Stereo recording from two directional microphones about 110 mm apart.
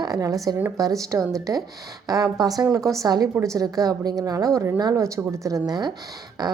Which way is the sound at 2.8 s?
5° left (ahead or behind).